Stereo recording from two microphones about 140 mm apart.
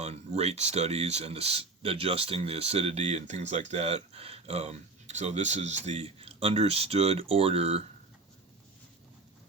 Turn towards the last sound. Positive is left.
turn(degrees=-45)  # may be behind; listen again after turning